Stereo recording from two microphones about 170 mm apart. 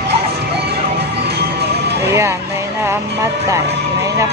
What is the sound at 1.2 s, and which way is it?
Music, 75° right (ahead or behind).